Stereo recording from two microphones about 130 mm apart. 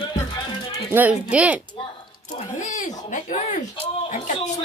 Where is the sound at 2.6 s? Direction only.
75° left (ahead or behind).